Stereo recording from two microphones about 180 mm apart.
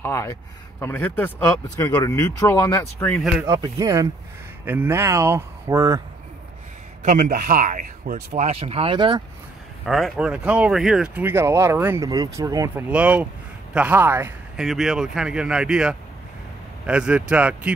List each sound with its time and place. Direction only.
0.0 s speech: 15° left (ahead or behind)
3.4 s speech: 20° right (ahead or behind)
7.0 s speech: 45° right (ahead or behind); by 9.2 s 30° right (ahead or behind)
9.8 s speech: centre (ahead or behind); by 12.8 s 20° right (ahead or behind)
12.9 s speech: 5° right (ahead or behind)
14.7 s speech: centre (ahead or behind)